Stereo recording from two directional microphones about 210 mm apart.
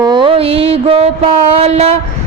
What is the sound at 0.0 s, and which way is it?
Mantra, 20° right (ahead or behind).